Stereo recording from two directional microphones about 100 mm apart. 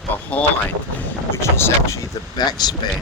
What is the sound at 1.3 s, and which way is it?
Speech, 25° left (ahead or behind).